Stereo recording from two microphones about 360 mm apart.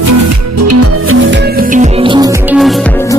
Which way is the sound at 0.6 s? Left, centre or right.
Right.